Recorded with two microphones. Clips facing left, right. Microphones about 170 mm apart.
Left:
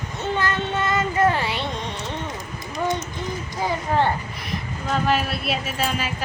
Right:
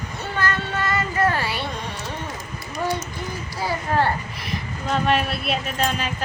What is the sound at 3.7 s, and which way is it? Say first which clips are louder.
Speech: even; 20° left (ahead or behind).